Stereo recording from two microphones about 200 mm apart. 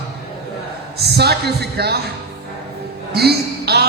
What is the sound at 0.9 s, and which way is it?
A man's voice, 55° right (ahead or behind).